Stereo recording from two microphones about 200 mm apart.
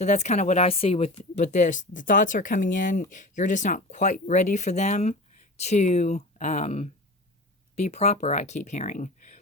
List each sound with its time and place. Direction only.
0.0 s speech: 35° left (ahead or behind)